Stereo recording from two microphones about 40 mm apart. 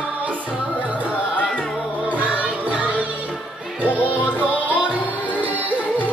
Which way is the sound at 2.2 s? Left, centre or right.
Right.